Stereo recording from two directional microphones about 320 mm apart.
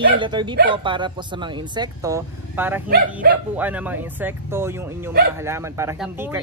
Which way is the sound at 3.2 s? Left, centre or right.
Right.